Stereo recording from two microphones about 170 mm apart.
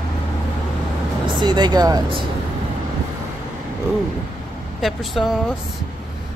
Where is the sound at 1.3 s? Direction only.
25° right (ahead or behind).